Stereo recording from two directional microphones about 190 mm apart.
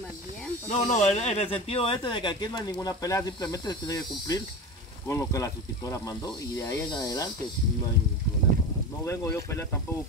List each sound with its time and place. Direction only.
0.7 s speech: 35° left (ahead or behind); by 7.2 s 20° left (ahead or behind)
9.0 s speech: 15° left (ahead or behind)